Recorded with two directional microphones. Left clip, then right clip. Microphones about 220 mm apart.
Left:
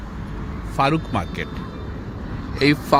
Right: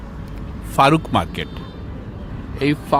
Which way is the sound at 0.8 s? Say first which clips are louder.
Right 6 dB; 30° right (ahead or behind).